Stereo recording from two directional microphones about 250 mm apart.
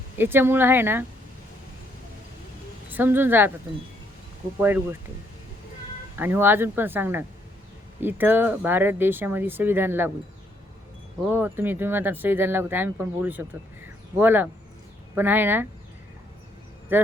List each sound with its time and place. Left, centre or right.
0.2 s speech: centre
2.9 s speech: centre
4.6 s speech: centre
6.1 s speech: centre
11.3 s speech: centre
16.9 s speech: centre